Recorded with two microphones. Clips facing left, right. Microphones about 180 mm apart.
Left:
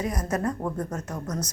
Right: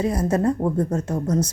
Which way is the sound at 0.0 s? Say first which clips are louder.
Right 7 dB; 30° right (ahead or behind).